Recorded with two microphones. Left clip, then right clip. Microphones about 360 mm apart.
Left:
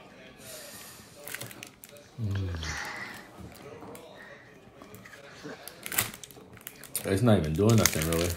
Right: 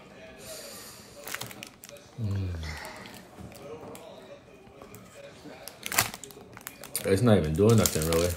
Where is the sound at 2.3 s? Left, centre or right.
Left.